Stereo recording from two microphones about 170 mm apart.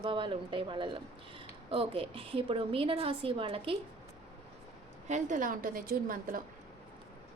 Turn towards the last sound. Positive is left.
turn(degrees=-55)  # may be behind; listen again after turning